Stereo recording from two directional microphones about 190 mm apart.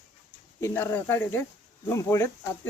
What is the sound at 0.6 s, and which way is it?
Speech, 10° left (ahead or behind).